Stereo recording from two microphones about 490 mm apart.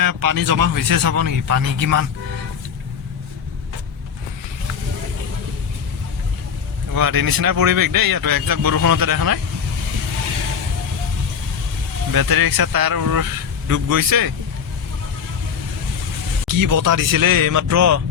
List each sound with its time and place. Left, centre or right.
0.0 s speech: right
6.9 s speech: right
12.1 s speech: right
16.5 s speech: right